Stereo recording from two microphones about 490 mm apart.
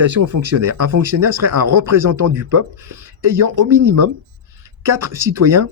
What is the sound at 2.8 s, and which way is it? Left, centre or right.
Speech, centre.